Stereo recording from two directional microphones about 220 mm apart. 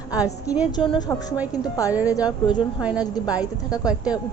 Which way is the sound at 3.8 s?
5° right (ahead or behind).